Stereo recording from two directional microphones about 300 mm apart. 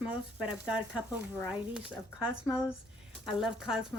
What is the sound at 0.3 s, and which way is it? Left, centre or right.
Speech, centre.